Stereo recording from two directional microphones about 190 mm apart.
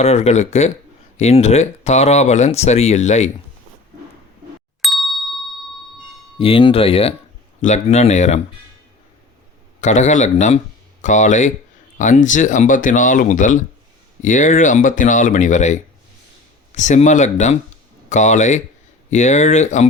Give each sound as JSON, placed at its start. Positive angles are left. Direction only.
{"t": 0.0, "sound": "speech", "side_deg": 35}
{"t": 4.8, "sound": "ding", "side_deg": 0}
{"t": 6.4, "sound": "speech", "side_deg": 30}
{"t": 9.8, "sound": "speech", "side_deg": 40}